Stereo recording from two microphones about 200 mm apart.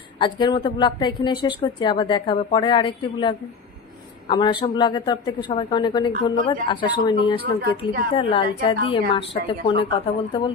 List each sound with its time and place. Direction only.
0.2 s speech: 25° left (ahead or behind)